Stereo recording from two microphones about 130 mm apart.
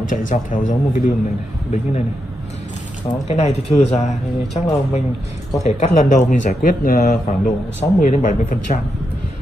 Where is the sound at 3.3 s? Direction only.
55° left (ahead or behind); by 7.5 s 90° left.